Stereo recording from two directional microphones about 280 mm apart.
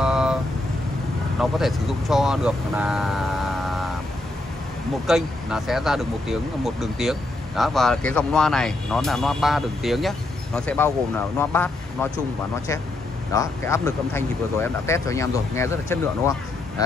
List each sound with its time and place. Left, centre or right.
0.0 s vehicle: centre
1.4 s speech: centre
5.0 s speech: centre
13.3 s speech: centre